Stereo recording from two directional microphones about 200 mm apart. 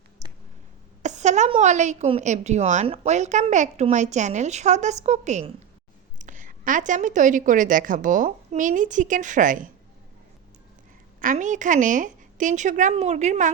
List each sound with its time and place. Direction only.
0.2 s a sound: 35° right (ahead or behind)
1.0 s a woman's voice: 35° right (ahead or behind)
11.2 s a woman's voice: 40° right (ahead or behind)